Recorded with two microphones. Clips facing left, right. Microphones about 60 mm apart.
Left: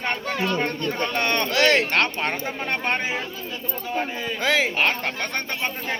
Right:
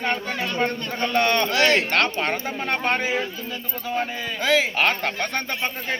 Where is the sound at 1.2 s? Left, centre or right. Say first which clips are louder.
Right 3 dB; left.